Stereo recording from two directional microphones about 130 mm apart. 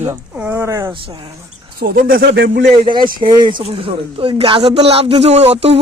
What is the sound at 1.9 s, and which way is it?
Speech, 90° right.